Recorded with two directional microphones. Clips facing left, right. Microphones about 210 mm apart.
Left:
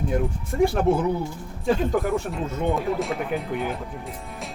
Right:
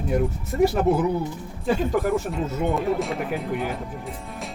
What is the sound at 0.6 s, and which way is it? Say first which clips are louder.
Speech: right 1 dB; 5° right (ahead or behind).